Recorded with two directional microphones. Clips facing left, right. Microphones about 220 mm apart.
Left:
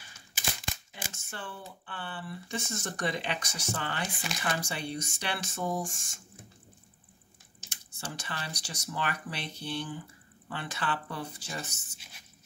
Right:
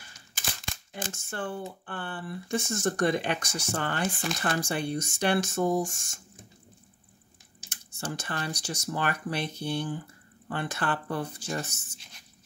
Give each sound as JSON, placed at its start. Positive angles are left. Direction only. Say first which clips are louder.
{"t": 0.3, "sound": "crumpling", "louder": "left 1 dB", "side_deg": 5}
{"t": 1.1, "sound": "speech", "louder": "right 9 dB", "side_deg": -50}
{"t": 7.7, "sound": "speech", "louder": "right 6 dB", "side_deg": -50}